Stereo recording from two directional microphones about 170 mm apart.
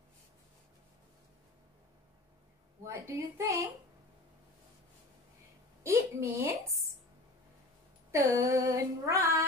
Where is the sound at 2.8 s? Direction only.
15° right (ahead or behind).